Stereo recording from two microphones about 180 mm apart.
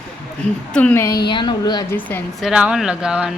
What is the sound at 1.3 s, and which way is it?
Speech, 25° left (ahead or behind).